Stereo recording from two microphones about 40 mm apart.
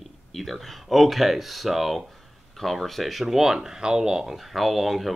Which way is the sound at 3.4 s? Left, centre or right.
Centre.